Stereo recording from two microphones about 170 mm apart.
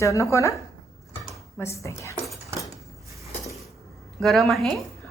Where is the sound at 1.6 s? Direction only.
15° left (ahead or behind).